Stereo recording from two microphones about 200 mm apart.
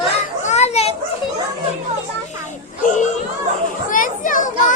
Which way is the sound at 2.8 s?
40° left (ahead or behind).